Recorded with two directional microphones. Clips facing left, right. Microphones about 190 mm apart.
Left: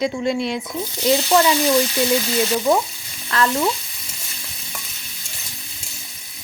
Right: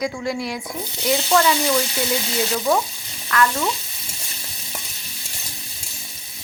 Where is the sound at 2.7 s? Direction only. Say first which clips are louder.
Left 2 dB; 15° left (ahead or behind).